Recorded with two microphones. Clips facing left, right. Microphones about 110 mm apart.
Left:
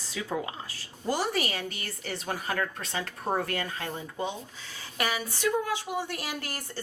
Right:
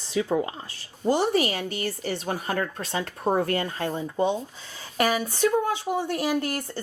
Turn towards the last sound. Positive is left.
turn(degrees=-30)  # may be behind; listen again after turning